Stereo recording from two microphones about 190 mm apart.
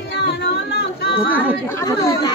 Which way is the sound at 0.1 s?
60° left (ahead or behind).